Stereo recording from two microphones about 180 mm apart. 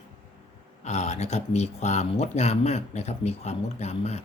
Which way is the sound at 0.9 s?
40° left (ahead or behind).